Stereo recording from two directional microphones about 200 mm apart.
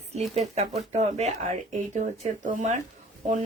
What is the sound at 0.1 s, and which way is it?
Speech, 35° right (ahead or behind).